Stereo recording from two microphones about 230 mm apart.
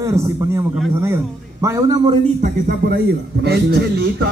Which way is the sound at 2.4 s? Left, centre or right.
Right.